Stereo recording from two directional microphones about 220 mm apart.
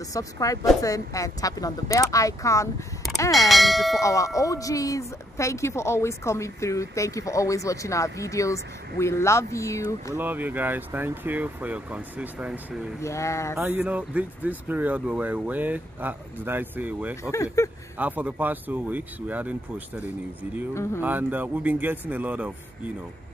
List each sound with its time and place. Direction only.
0.1 s speech: 15° left (ahead or behind)
3.4 s speech: centre (ahead or behind)
4.0 s speech: 15° left (ahead or behind)
10.1 s speech: 10° right (ahead or behind)
13.0 s speech: 15° left (ahead or behind)
13.6 s speech: 5° right (ahead or behind)
17.2 s speech: 15° left (ahead or behind)
17.9 s speech: 5° right (ahead or behind)
20.7 s speech: 10° left (ahead or behind)
21.0 s speech: 10° right (ahead or behind)